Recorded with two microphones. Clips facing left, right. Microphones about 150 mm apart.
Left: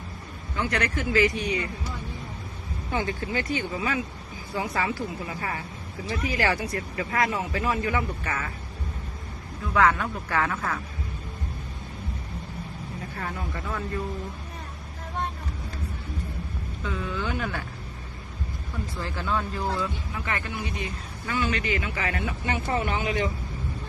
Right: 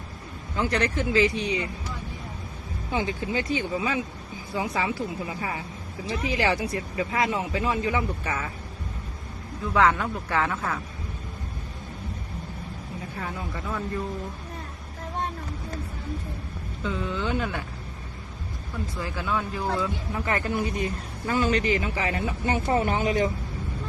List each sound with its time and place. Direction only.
0.7 s speech: 30° right (ahead or behind)
1.4 s speech: 15° right (ahead or behind)
2.9 s speech: 15° right (ahead or behind)
9.7 s speech: 25° right (ahead or behind)
13.1 s speech: 5° right (ahead or behind)
16.8 s speech: 25° right (ahead or behind)
19.0 s speech: 10° right (ahead or behind)
20.1 s a man's voice: 40° right (ahead or behind)